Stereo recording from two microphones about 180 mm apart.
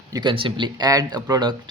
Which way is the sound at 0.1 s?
25° right (ahead or behind).